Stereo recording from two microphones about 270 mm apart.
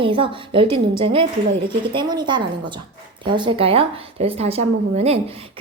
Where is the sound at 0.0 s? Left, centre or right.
Centre.